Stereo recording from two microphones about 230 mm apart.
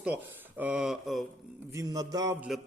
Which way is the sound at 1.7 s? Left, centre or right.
Centre.